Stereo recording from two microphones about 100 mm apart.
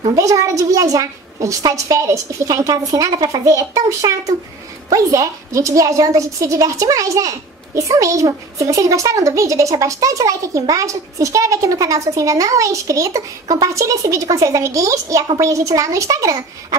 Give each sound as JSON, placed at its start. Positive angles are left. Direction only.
{"t": 0.1, "sound": "a child's voice", "side_deg": -35}